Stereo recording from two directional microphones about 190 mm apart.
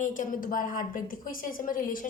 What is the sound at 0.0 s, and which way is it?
A woman's voice, 45° left (ahead or behind).